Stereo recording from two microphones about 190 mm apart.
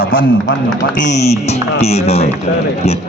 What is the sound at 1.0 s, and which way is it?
Speech, 35° left (ahead or behind).